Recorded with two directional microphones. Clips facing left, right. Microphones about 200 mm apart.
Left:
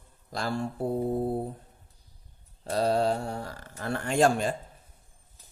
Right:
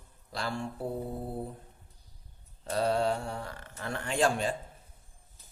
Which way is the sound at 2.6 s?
35° left (ahead or behind).